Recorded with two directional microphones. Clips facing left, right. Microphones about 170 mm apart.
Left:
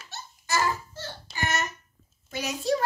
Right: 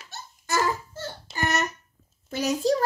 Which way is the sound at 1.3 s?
40° right (ahead or behind).